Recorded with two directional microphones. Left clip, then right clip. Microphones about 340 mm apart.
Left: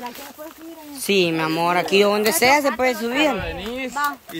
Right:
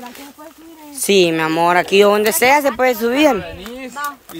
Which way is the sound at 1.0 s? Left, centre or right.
Centre.